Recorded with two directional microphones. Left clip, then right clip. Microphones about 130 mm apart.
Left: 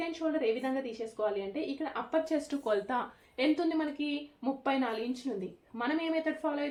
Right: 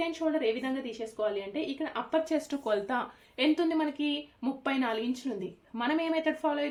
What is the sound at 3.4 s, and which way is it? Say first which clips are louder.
Speech: right 2 dB; 45° right (ahead or behind).